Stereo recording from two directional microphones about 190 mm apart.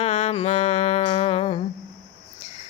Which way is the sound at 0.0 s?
35° left (ahead or behind).